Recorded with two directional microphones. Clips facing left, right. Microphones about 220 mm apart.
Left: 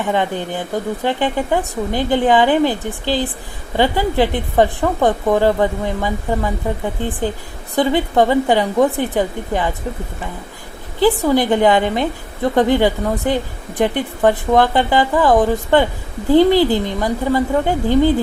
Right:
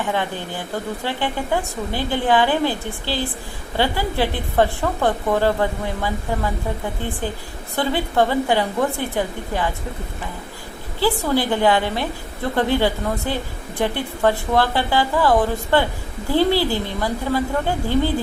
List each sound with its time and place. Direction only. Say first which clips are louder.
0.1 s a woman's voice: left 5 dB; 20° left (ahead or behind)
7.8 s a woman's voice: left 5 dB; 20° left (ahead or behind)
11.0 s a woman's voice: left 5 dB; 20° left (ahead or behind)